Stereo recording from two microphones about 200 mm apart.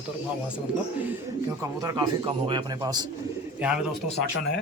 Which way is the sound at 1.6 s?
15° right (ahead or behind).